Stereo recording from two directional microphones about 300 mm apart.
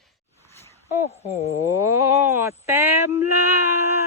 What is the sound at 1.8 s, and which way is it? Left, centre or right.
Speech, centre.